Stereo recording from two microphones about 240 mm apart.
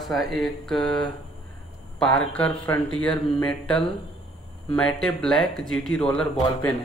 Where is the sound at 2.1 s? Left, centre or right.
Centre.